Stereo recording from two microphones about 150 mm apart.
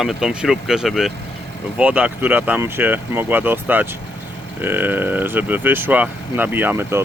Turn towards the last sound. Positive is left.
turn(degrees=-15)  # may be behind; listen again after turning